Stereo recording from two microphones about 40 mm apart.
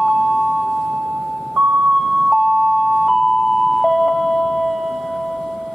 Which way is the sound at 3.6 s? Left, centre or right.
Centre.